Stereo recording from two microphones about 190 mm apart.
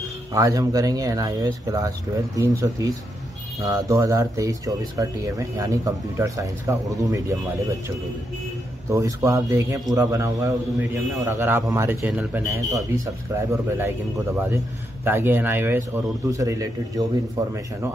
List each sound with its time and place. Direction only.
0.3 s speech: 20° right (ahead or behind)
8.9 s speech: 15° right (ahead or behind)
12.7 s speech: 15° right (ahead or behind)